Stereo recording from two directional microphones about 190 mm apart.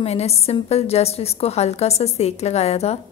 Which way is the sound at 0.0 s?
35° left (ahead or behind).